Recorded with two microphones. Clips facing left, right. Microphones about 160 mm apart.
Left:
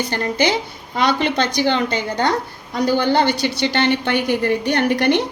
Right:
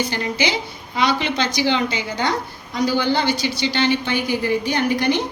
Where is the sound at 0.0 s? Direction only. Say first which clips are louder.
Left 3 dB; 50° left (ahead or behind).